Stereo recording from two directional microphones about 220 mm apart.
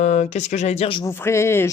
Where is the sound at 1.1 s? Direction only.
10° left (ahead or behind).